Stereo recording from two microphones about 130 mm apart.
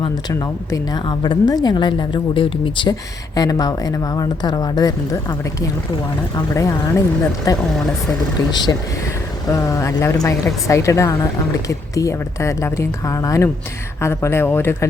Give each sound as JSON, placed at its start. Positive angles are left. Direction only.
{"t": 1.0, "sound": "speech", "side_deg": 40}
{"t": 3.3, "sound": "speech", "side_deg": 30}
{"t": 6.3, "sound": "speech", "side_deg": 25}
{"t": 9.5, "sound": "speech", "side_deg": 25}